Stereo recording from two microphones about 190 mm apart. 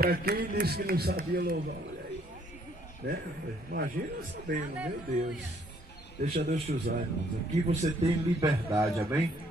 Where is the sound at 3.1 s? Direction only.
55° right (ahead or behind).